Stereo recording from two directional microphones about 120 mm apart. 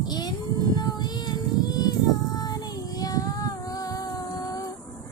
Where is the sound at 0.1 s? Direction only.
35° left (ahead or behind).